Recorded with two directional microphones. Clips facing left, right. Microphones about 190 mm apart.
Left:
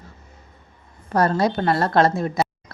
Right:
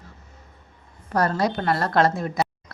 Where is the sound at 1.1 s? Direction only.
25° left (ahead or behind).